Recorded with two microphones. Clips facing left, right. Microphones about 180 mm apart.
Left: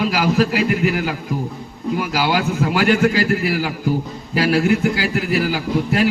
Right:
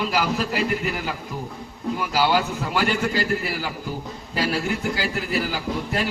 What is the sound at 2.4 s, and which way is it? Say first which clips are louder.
A man's voice: left 5 dB; 75° left (ahead or behind).